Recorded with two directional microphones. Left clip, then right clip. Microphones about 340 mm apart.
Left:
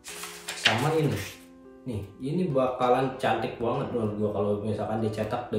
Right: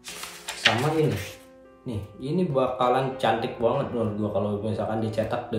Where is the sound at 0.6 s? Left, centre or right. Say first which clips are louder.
Right 2 dB; centre.